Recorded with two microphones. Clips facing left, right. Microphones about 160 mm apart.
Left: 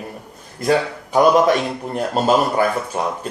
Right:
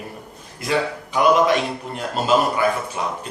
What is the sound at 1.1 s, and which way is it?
A man's voice, 45° left (ahead or behind).